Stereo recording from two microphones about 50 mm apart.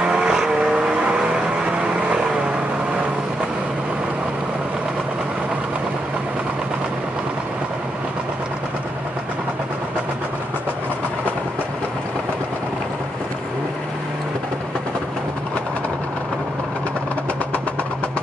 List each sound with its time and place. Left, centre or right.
0.0 s vehicle: centre